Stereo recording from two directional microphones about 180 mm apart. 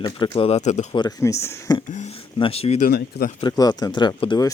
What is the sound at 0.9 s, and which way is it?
Speech, 25° left (ahead or behind).